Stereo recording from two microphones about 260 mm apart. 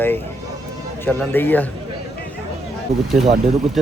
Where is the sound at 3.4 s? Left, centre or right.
Centre.